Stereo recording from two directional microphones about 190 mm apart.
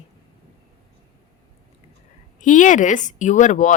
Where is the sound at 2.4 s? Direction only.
40° left (ahead or behind).